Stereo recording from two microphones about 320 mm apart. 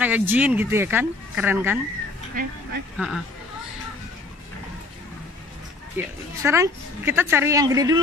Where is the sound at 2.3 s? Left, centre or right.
Right.